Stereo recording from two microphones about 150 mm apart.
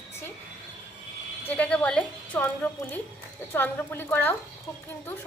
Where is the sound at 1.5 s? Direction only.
10° left (ahead or behind).